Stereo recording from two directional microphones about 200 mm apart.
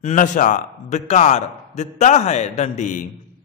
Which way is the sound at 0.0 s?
40° left (ahead or behind).